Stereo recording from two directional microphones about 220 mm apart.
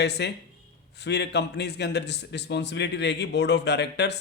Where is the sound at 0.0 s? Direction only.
50° left (ahead or behind).